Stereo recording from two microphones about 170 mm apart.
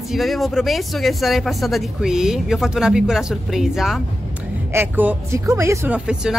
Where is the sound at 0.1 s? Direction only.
Centre (ahead or behind).